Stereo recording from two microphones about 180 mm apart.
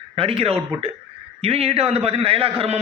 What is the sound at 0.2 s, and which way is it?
A man's voice, 30° right (ahead or behind).